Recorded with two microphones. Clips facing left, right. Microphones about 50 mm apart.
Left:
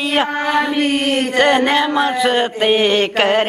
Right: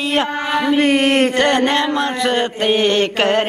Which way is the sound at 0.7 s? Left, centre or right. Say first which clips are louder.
Right 3 dB; right.